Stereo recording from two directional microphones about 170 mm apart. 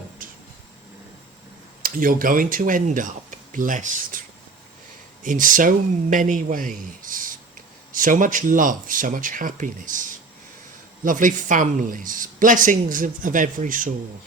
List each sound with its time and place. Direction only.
0.2 s a sound: 55° right (ahead or behind)
1.8 s speech: 55° right (ahead or behind)
5.2 s speech: 50° right (ahead or behind)